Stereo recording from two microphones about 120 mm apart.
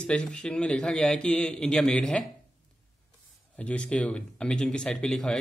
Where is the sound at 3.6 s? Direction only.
10° left (ahead or behind).